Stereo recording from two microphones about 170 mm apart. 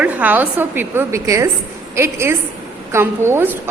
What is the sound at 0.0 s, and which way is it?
A woman's voice, 10° right (ahead or behind).